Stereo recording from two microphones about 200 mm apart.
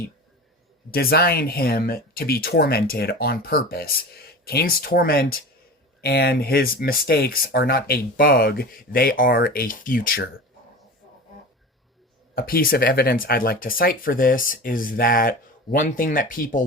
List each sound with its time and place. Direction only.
0.9 s speech: 50° left (ahead or behind)
12.3 s speech: 45° left (ahead or behind)